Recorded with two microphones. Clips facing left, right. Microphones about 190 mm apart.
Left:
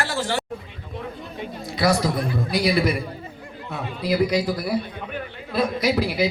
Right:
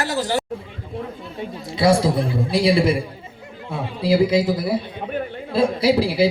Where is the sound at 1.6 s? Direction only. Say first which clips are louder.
Right 4 dB; 25° right (ahead or behind).